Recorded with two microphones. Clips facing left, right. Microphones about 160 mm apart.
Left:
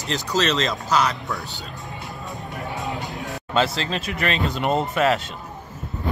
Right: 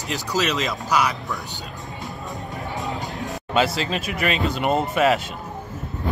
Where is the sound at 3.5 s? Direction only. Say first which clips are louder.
Right 1 dB; 10° right (ahead or behind).